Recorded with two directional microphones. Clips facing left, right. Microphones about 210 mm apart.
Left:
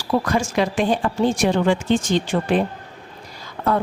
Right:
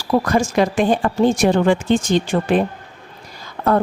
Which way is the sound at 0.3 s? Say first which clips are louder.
Right 4 dB; 45° right (ahead or behind).